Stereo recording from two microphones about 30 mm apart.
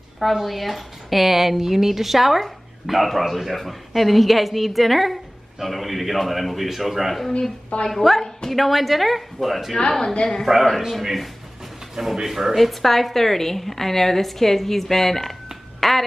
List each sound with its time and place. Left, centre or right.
0.2 s speech: centre
9.8 s a woman's voice: left
10.9 s speech: centre
11.9 s speech: centre
12.5 s a woman's voice: centre